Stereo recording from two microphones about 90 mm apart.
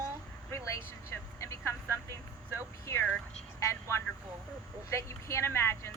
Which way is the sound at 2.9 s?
30° left (ahead or behind).